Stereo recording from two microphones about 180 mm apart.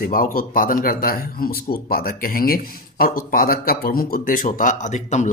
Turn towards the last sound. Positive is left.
turn(degrees=40)  # may be behind; listen again after turning